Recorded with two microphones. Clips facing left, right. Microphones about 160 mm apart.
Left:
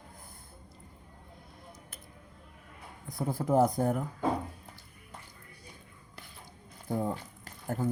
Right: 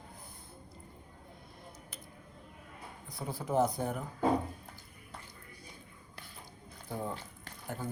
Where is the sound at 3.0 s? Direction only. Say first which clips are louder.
Left 7 dB; 50° left (ahead or behind).